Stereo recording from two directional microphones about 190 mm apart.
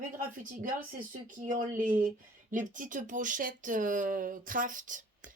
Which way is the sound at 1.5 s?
40° right (ahead or behind).